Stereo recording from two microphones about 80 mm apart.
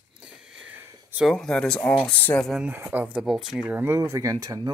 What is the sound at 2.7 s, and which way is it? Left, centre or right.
Speech, right.